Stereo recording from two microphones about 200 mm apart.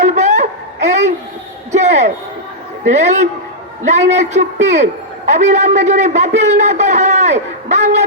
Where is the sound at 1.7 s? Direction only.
35° right (ahead or behind).